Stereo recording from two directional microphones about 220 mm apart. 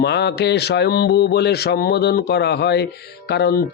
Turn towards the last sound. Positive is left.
turn(degrees=50)  # may be behind; listen again after turning